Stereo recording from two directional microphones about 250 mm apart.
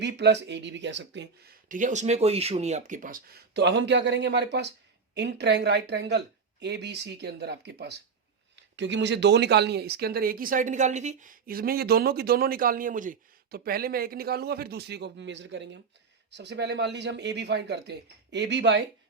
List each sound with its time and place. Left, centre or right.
0.0 s speech: right